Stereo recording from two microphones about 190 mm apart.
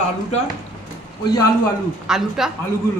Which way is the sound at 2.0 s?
Centre (ahead or behind).